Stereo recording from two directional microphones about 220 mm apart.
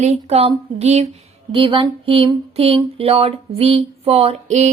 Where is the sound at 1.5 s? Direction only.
25° right (ahead or behind).